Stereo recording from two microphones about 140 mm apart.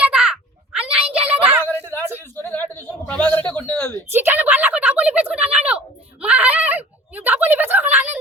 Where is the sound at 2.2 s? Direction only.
15° left (ahead or behind).